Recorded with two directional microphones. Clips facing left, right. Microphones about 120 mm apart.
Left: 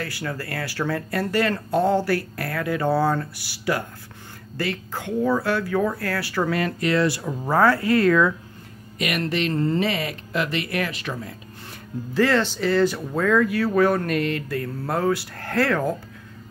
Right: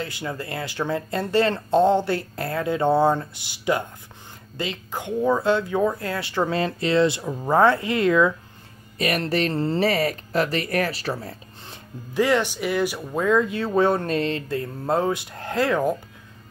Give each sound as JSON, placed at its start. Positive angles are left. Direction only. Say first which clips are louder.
{"t": 0.0, "sound": "speech", "louder": "even", "side_deg": -20}
{"t": 8.9, "sound": "speech", "louder": "right 2 dB", "side_deg": -35}
{"t": 11.6, "sound": "speech", "louder": "left 8 dB", "side_deg": -20}